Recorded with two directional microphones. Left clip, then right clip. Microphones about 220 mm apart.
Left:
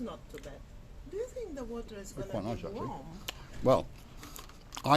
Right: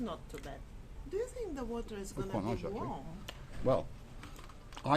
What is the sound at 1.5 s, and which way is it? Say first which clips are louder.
Speech: even; 35° right (ahead or behind).